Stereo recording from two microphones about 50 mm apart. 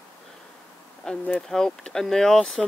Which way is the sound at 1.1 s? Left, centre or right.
Centre.